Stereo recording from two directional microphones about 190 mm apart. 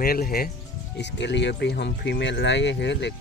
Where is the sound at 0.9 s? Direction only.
65° left (ahead or behind).